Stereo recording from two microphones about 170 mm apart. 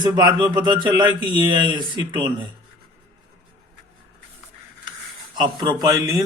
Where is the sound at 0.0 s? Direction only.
25° right (ahead or behind).